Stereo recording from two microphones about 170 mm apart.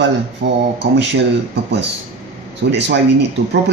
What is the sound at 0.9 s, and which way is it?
Speech, 90° right.